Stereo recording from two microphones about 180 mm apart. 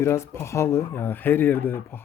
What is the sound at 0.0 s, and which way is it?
Speech, 15° left (ahead or behind).